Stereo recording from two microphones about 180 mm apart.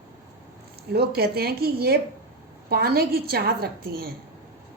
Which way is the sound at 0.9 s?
60° right (ahead or behind).